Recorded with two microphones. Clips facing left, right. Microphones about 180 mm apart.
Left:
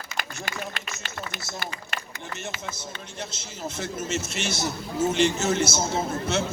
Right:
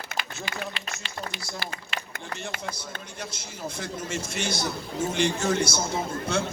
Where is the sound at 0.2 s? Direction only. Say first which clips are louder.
Left 1 dB; 45° left (ahead or behind).